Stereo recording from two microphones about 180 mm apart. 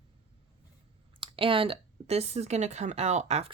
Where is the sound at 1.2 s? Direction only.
30° right (ahead or behind).